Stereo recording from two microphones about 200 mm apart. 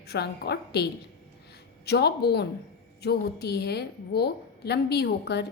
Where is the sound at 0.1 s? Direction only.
55° left (ahead or behind).